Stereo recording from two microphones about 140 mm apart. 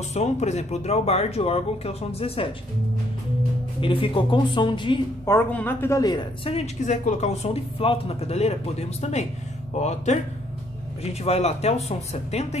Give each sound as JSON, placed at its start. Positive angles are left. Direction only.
{"t": 0.1, "sound": "speech", "side_deg": 50}
{"t": 3.8, "sound": "a woman's voice", "side_deg": 40}
{"t": 5.2, "sound": "speech", "side_deg": 15}
{"t": 6.5, "sound": "speech", "side_deg": 55}
{"t": 11.2, "sound": "speech", "side_deg": 50}